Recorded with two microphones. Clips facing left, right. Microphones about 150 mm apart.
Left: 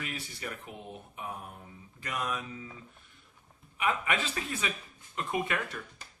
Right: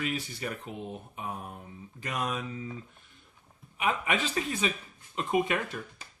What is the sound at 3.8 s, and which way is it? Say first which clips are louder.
Speech: right 2 dB; 20° right (ahead or behind).